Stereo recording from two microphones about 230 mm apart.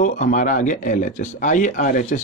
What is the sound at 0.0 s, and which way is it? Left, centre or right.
Speech, left.